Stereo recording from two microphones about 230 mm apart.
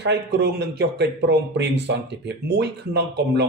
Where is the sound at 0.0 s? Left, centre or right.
Right.